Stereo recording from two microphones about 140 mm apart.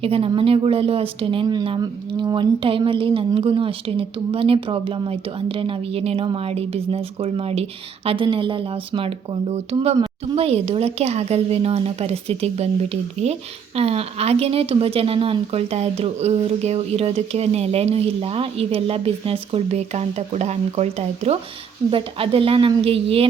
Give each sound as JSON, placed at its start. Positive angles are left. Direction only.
{"t": 0.0, "sound": "speech", "side_deg": -45}
{"t": 21.8, "sound": "speech", "side_deg": -40}